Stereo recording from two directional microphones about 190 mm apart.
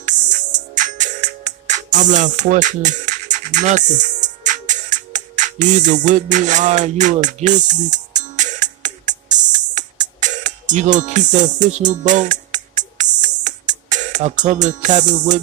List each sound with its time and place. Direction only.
0.0 s music: 40° right (ahead or behind)